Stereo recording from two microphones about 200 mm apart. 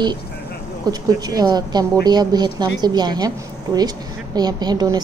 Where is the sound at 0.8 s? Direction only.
20° right (ahead or behind).